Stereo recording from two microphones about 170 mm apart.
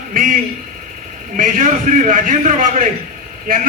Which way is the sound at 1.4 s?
50° right (ahead or behind).